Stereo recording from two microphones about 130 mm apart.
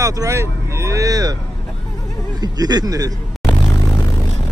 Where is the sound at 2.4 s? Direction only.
30° right (ahead or behind).